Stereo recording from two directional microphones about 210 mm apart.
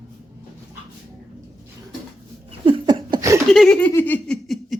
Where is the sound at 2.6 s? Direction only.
25° right (ahead or behind).